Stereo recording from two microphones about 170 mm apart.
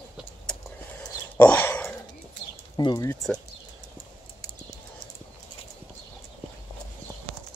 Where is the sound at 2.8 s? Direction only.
25° left (ahead or behind).